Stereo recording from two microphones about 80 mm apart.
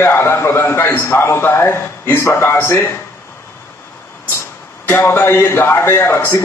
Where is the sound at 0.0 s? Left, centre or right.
Left.